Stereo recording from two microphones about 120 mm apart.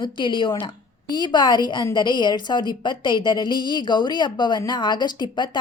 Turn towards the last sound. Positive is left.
turn(degrees=40)  # may be behind; listen again after turning